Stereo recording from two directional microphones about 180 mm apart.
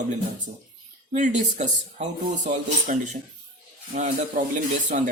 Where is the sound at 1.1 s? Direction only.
40° right (ahead or behind).